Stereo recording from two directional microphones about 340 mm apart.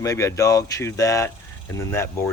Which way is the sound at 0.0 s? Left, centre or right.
Centre.